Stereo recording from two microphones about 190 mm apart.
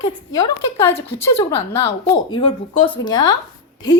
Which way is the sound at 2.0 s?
25° left (ahead or behind).